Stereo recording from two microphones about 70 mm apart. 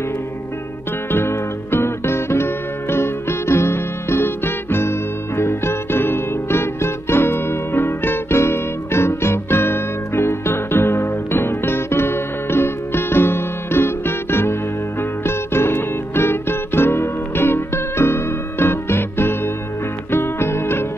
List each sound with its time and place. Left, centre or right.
1.1 s music: left